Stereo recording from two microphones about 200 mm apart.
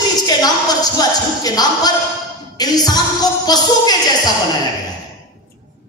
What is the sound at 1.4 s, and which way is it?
Speech, 20° left (ahead or behind).